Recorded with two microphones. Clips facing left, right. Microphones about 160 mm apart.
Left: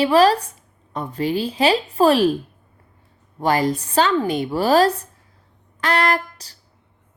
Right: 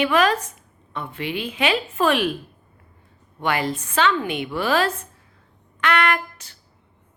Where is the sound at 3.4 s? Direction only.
40° left (ahead or behind).